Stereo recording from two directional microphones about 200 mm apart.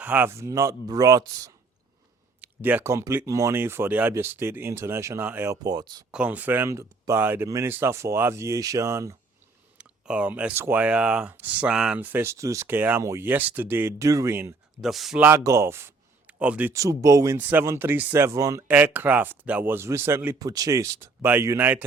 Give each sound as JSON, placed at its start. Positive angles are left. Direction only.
{"t": 0.0, "sound": "a man's voice", "side_deg": -10}
{"t": 6.1, "sound": "a man's voice", "side_deg": -5}
{"t": 14.8, "sound": "a man's voice", "side_deg": 0}